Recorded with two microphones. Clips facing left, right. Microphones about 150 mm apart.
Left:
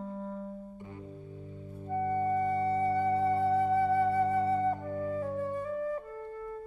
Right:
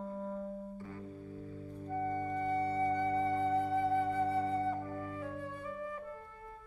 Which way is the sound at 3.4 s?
45° left (ahead or behind).